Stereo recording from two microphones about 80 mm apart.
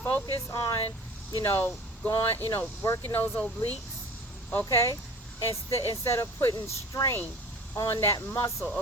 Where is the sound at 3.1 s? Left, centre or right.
Left.